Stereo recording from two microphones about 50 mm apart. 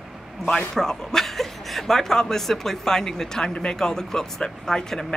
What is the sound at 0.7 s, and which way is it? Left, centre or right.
A woman's voice, centre.